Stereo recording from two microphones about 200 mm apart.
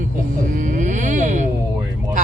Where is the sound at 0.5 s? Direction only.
40° right (ahead or behind).